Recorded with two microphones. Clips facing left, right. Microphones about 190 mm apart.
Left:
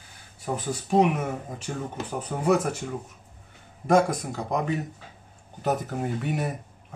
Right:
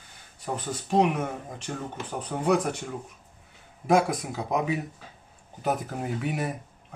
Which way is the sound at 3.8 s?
Centre (ahead or behind).